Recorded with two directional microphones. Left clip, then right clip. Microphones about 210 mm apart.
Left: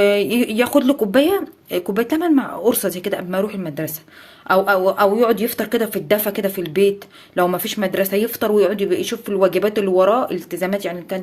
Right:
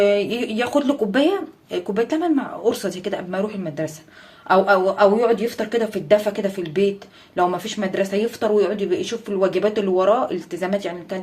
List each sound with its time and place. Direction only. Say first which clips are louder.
0.0 s speech: left 2 dB; 30° left (ahead or behind)